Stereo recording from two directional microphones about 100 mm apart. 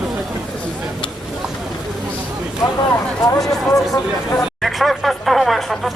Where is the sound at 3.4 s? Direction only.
Centre (ahead or behind).